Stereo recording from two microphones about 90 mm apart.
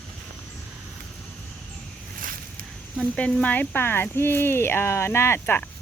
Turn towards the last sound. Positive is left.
turn(degrees=25)  # may be behind; listen again after turning